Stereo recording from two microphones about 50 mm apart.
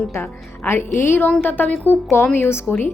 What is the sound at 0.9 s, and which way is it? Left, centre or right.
Speech, left.